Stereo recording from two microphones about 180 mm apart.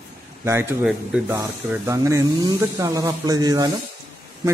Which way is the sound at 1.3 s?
15° right (ahead or behind).